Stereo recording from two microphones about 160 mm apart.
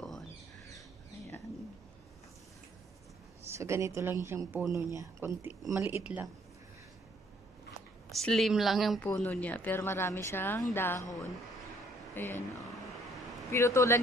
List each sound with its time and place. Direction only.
3.5 s a woman's voice: 15° right (ahead or behind)
8.1 s speech: centre (ahead or behind)
9.2 s speech: 10° left (ahead or behind)
12.2 s speech: 15° left (ahead or behind)
13.5 s speech: 15° left (ahead or behind)